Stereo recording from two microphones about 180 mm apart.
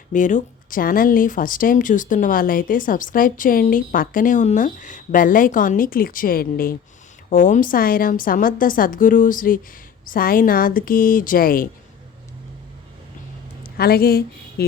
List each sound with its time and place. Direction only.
0.1 s speech: 45° left (ahead or behind)
13.7 s speech: 60° left (ahead or behind)